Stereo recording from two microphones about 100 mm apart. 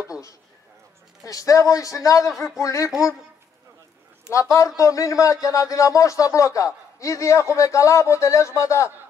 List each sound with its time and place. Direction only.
1.2 s speech: 35° left (ahead or behind)
4.3 s speech: 30° left (ahead or behind)